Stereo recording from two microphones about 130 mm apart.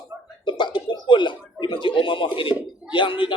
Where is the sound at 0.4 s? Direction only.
35° left (ahead or behind).